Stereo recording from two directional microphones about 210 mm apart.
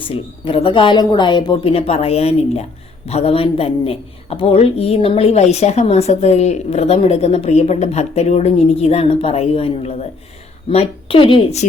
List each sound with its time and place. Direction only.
0.0 s a woman's voice: 25° left (ahead or behind)